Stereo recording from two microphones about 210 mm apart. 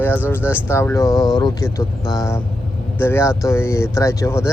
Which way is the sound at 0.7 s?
15° left (ahead or behind).